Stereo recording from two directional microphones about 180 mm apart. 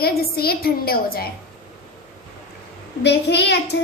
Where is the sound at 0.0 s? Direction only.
60° left (ahead or behind).